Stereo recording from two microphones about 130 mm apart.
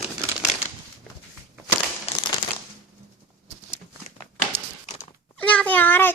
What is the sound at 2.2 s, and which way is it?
Crumpling, 35° left (ahead or behind).